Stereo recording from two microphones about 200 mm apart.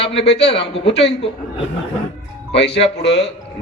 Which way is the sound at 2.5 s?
60° left (ahead or behind).